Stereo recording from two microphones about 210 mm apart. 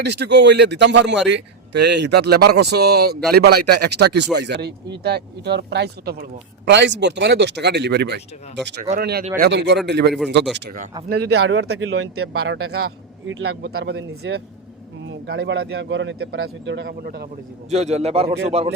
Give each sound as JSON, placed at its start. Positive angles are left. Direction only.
{"t": 0.0, "sound": "speech", "side_deg": -55}
{"t": 8.8, "sound": "speech", "side_deg": -45}
{"t": 11.1, "sound": "speech", "side_deg": -55}
{"t": 12.8, "sound": "speech", "side_deg": -60}
{"t": 17.7, "sound": "a man's voice", "side_deg": -30}